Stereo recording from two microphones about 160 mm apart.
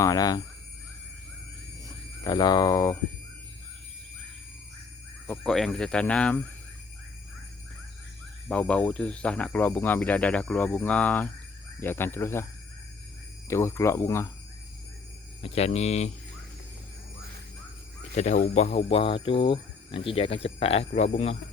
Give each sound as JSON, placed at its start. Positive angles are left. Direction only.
{"t": 0.0, "sound": "speech", "side_deg": 25}
{"t": 1.8, "sound": "speech", "side_deg": 25}
{"t": 5.3, "sound": "speech", "side_deg": 5}
{"t": 8.4, "sound": "speech", "side_deg": 5}
{"t": 13.5, "sound": "speech", "side_deg": 15}
{"t": 15.4, "sound": "speech", "side_deg": 40}
{"t": 18.1, "sound": "speech", "side_deg": 45}